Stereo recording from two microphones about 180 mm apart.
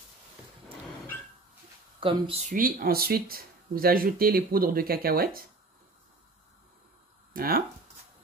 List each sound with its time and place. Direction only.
2.0 s speech: 30° right (ahead or behind)
2.5 s speech: 55° right (ahead or behind)
7.3 s speech: 55° right (ahead or behind)